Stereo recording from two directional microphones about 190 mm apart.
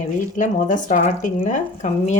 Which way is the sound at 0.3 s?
40° left (ahead or behind).